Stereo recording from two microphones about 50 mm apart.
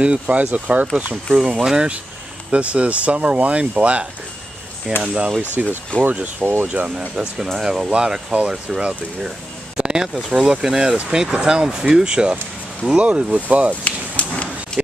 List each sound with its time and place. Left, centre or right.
0.0 s speech: right
2.5 s speech: right
6.4 s speech: right
6.7 s speech: right
7.5 s speech: centre
7.9 s speech: centre
9.8 s a sound: centre
10.1 s speech: centre; by 13.7 s right
13.8 s a sound: left